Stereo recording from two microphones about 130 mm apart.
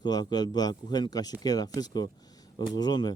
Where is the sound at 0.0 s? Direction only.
30° left (ahead or behind).